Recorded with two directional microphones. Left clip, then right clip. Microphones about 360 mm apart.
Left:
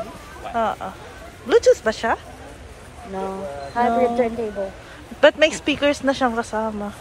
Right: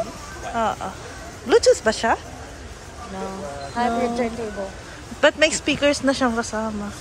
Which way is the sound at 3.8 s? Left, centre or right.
Left.